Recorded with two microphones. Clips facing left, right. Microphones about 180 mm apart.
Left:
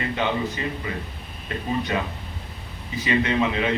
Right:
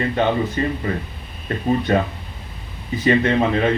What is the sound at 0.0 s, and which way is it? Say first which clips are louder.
Speech: right 6 dB; 45° right (ahead or behind).